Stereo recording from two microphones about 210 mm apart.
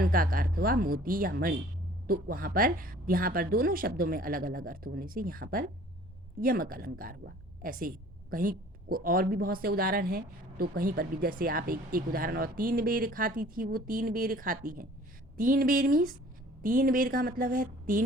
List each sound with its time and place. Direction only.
0.0 s a woman's voice: 45° right (ahead or behind)